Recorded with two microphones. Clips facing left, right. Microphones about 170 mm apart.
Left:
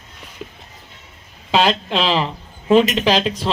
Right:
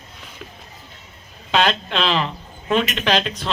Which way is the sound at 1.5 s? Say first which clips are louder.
Left 2 dB; 10° left (ahead or behind).